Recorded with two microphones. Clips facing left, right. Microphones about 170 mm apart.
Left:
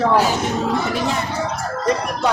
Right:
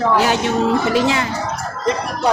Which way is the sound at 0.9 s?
90° right.